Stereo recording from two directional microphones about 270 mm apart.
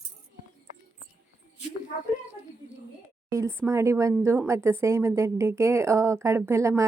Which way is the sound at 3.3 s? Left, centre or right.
Centre.